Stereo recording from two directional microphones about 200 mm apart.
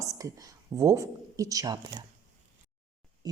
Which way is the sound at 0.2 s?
15° right (ahead or behind).